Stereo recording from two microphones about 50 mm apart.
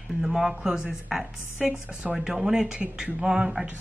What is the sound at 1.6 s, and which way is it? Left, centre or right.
Speech, right.